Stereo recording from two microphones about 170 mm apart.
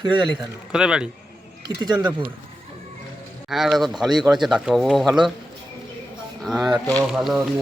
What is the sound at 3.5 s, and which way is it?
Speech, centre (ahead or behind).